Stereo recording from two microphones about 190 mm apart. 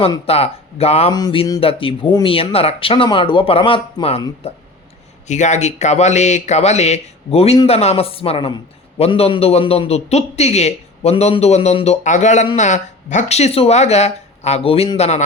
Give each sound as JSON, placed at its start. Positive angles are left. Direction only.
{"t": 0.0, "sound": "a man's voice", "side_deg": 30}